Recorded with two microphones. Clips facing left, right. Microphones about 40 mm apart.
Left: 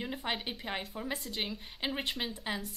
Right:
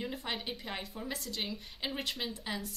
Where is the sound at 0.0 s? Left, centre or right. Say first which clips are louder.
Left 2 dB; centre.